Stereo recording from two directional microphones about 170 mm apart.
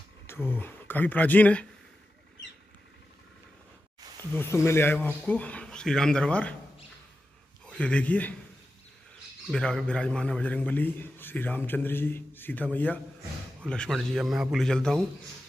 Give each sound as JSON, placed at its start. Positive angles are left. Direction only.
{"t": 0.3, "sound": "a man's voice", "side_deg": 10}
{"t": 4.3, "sound": "a man's voice", "side_deg": 15}
{"t": 7.6, "sound": "a man's voice", "side_deg": 5}
{"t": 9.5, "sound": "a man's voice", "side_deg": 5}